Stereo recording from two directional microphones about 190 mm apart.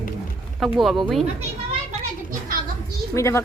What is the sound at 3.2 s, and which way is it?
Speech, 15° left (ahead or behind).